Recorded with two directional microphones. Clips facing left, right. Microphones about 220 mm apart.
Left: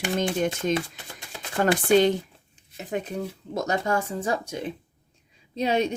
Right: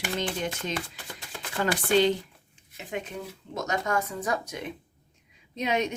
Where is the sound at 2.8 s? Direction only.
40° left (ahead or behind).